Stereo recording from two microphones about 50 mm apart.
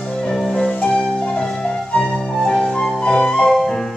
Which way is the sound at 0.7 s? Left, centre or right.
Left.